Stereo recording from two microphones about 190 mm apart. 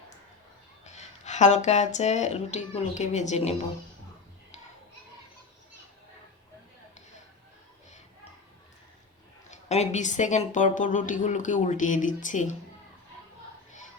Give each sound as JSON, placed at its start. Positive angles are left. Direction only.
{"t": 0.9, "sound": "speech", "side_deg": 40}
{"t": 9.5, "sound": "speech", "side_deg": 35}